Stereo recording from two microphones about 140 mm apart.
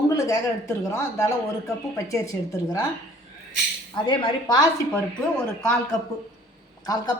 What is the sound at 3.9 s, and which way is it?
Speech, 35° left (ahead or behind).